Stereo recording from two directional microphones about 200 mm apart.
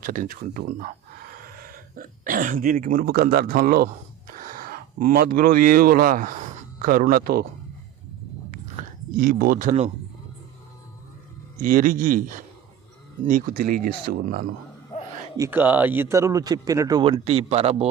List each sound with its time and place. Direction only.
0.0 s speech: 40° right (ahead or behind)
8.8 s a sound: 40° right (ahead or behind)
9.1 s speech: 45° right (ahead or behind)
11.6 s speech: 40° right (ahead or behind)
15.4 s speech: 10° right (ahead or behind); by 17.8 s 30° right (ahead or behind)